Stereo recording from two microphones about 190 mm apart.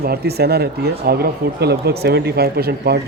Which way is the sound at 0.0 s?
55° right (ahead or behind).